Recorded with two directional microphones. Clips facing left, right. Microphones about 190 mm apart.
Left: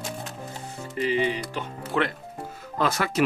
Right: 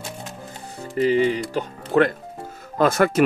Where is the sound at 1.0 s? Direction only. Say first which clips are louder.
Right 6 dB; 40° right (ahead or behind).